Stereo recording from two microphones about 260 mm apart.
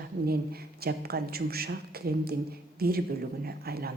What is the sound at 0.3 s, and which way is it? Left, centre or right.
A man's voice, right.